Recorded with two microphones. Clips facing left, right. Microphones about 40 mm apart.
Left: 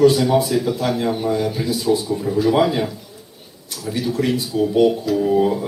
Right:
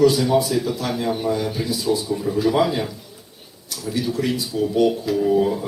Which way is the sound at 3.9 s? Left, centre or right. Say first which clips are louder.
Left 2 dB; centre.